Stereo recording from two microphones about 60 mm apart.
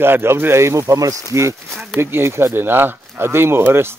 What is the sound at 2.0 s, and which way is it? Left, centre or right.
Speech, right.